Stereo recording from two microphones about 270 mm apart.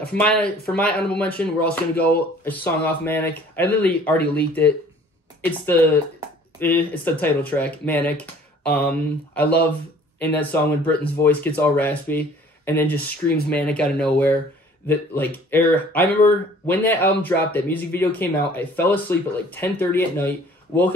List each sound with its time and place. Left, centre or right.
0.1 s speech: centre
6.6 s speech: centre